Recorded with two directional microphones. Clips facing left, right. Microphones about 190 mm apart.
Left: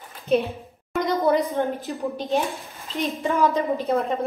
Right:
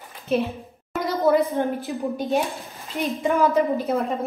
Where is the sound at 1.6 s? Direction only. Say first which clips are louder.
Right 1 dB; 15° right (ahead or behind).